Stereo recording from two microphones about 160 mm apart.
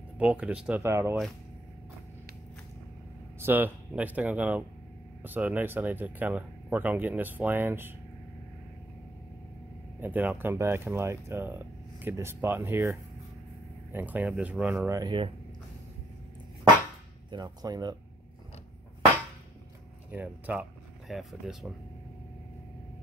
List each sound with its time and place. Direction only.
0.2 s speech: 5° right (ahead or behind)
3.3 s speech: 10° right (ahead or behind)
9.9 s speech: 10° right (ahead or behind)
13.9 s speech: 10° right (ahead or behind); by 15.3 s 30° right (ahead or behind)
17.3 s speech: 25° right (ahead or behind)
20.1 s speech: 10° right (ahead or behind)